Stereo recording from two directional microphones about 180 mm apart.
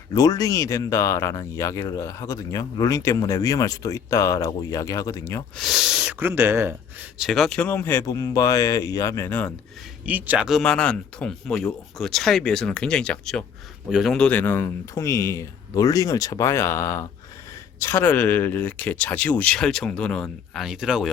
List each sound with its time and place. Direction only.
0.1 s speech: 20° left (ahead or behind)
5.5 s speech: centre (ahead or behind)
10.1 s speech: 10° right (ahead or behind)